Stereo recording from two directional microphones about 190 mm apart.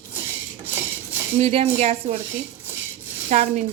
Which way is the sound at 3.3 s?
40° right (ahead or behind).